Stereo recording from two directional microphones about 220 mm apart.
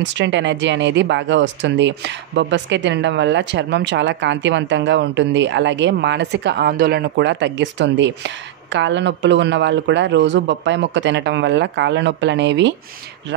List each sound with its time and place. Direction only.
0.0 s speech: 55° right (ahead or behind)